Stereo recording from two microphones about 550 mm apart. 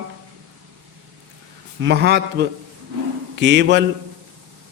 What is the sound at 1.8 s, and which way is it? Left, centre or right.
A man's voice, centre.